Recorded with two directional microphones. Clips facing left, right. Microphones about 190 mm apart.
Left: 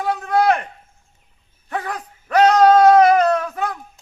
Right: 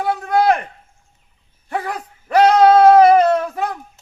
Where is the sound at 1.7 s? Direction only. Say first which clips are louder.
Right 2 dB; 10° right (ahead or behind).